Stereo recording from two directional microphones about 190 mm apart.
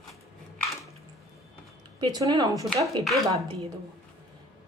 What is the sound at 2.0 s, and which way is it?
Speech, 20° right (ahead or behind).